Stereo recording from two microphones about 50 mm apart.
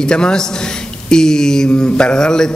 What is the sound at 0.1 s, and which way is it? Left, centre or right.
A man's voice, centre.